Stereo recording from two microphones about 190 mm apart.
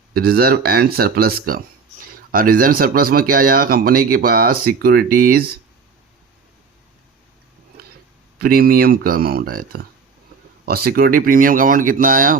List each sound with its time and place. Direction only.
0.1 s speech: 55° right (ahead or behind)
8.4 s speech: 50° right (ahead or behind)